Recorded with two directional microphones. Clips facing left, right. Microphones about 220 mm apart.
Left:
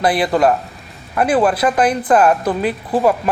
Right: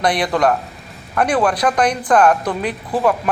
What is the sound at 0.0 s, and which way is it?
A man's voice, 5° left (ahead or behind).